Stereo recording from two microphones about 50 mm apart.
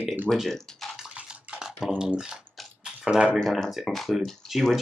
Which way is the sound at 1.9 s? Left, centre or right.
Centre.